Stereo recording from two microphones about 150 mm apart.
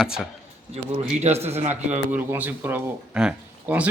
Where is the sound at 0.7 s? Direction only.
45° right (ahead or behind).